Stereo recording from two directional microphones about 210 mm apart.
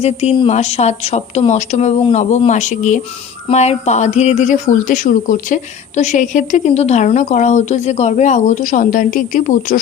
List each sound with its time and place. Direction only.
0.0 s speech: 30° left (ahead or behind)